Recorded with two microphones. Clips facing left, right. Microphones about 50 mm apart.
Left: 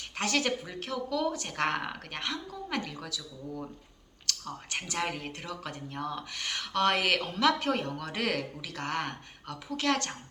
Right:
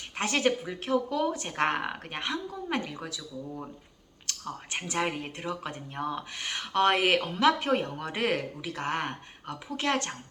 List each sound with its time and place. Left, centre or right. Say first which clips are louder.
0.2 s speech: right 3 dB; right